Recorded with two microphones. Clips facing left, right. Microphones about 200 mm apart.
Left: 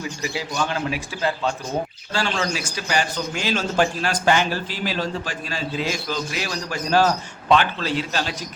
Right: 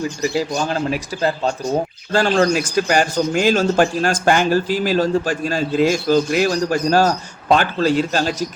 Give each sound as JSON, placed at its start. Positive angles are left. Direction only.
{"t": 0.0, "sound": "a man's voice", "side_deg": -40}